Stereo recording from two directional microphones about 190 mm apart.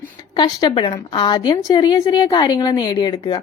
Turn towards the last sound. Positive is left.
turn(degrees=20)  # may be behind; listen again after turning